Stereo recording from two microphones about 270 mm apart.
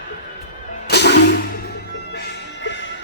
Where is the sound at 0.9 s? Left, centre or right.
Left.